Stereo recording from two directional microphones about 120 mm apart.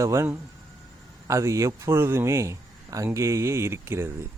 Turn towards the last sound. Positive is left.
turn(degrees=-20)  # may be behind; listen again after turning